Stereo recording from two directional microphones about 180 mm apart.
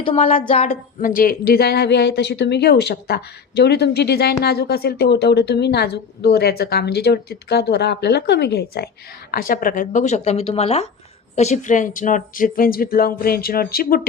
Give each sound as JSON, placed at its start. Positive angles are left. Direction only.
{"t": 0.3, "sound": "a woman's voice", "side_deg": 35}
{"t": 9.3, "sound": "speech", "side_deg": 50}